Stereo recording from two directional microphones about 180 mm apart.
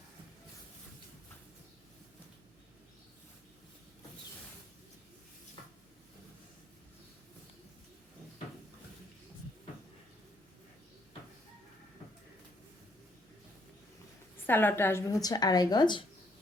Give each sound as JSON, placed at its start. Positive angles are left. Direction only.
{"t": 14.4, "sound": "speech", "side_deg": 10}